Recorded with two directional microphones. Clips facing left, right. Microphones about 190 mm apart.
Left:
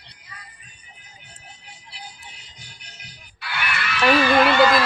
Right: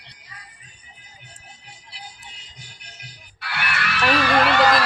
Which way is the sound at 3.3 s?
65° right (ahead or behind).